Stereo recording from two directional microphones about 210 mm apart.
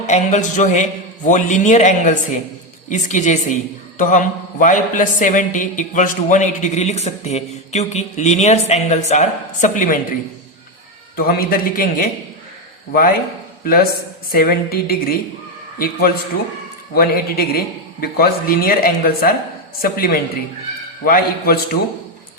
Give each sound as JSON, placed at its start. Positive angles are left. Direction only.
{"t": 0.1, "sound": "a man's voice", "side_deg": 35}
{"t": 11.2, "sound": "a woman's voice", "side_deg": 45}